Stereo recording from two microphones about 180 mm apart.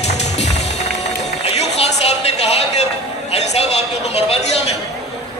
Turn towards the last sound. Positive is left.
turn(degrees=35)  # may be behind; listen again after turning